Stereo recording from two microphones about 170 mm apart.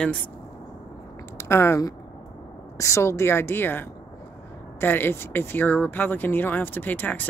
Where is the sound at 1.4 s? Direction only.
15° left (ahead or behind).